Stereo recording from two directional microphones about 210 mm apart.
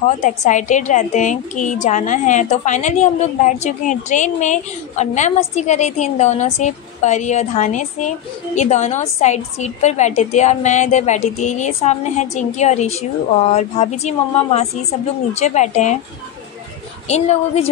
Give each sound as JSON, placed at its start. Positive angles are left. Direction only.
{"t": 0.0, "sound": "a woman's voice", "side_deg": 35}
{"t": 17.1, "sound": "a woman's voice", "side_deg": 30}